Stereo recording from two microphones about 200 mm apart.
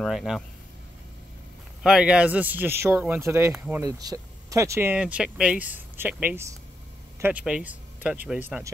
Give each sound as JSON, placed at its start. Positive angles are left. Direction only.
{"t": 0.0, "sound": "speech", "side_deg": 0}
{"t": 1.8, "sound": "speech", "side_deg": -5}